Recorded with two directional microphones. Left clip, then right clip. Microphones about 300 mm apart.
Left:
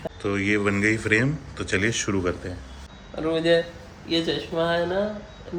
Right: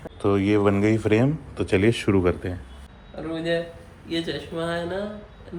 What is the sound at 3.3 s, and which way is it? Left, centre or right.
Speech, left.